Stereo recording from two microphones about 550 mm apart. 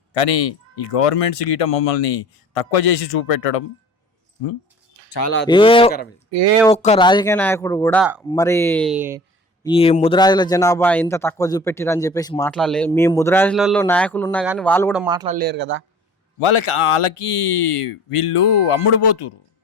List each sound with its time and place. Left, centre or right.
0.1 s speech: left
5.5 s a man's voice: centre
9.6 s a man's voice: centre
15.0 s speech: centre
16.4 s speech: left